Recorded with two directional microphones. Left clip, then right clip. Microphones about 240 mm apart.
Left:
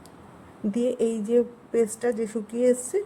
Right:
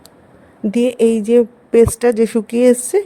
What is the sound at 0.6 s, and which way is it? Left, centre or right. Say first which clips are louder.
Speech: right 11 dB; right.